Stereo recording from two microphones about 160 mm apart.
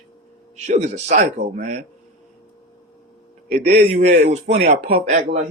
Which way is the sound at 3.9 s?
45° right (ahead or behind).